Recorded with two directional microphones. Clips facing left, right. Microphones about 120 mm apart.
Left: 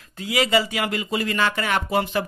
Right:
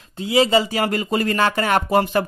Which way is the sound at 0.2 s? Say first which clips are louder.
Right 4 dB; 25° right (ahead or behind).